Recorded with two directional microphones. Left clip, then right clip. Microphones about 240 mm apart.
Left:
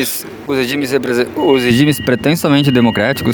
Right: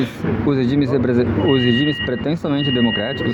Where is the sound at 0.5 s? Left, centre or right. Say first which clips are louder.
Left 7 dB; left.